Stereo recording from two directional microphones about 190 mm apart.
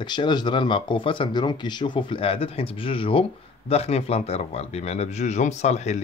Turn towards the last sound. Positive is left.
turn(degrees=35)  # may be behind; listen again after turning